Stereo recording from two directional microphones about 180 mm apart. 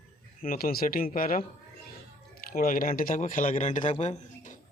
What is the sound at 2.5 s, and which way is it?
A man's voice, 50° left (ahead or behind).